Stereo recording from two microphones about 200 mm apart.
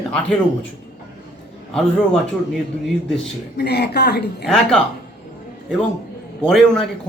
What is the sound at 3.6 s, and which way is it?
Speech, 55° left (ahead or behind).